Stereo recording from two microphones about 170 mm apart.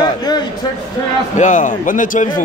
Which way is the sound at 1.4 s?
50° left (ahead or behind).